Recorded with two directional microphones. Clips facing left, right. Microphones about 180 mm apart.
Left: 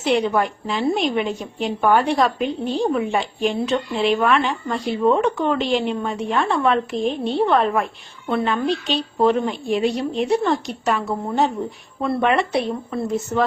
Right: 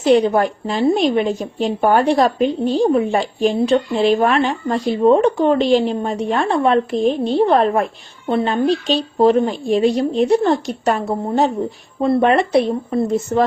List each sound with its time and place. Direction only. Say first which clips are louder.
0.0 s a woman's voice: right 6 dB; 40° right (ahead or behind)
6.5 s a woman's voice: right 3 dB; 30° right (ahead or behind)
6.9 s a woman's voice: right 5 dB; 40° right (ahead or behind)